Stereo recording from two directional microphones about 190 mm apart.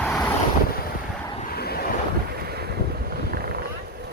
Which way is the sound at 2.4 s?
55° right (ahead or behind).